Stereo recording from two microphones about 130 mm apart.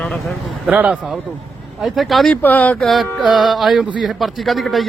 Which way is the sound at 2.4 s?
15° left (ahead or behind).